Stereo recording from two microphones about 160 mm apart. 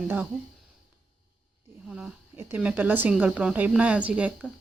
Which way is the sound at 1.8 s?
5° right (ahead or behind).